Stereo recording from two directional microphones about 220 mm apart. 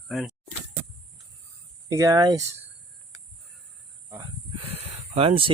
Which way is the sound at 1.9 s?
15° right (ahead or behind).